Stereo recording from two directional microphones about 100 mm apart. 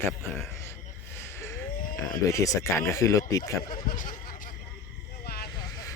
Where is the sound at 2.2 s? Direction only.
35° left (ahead or behind).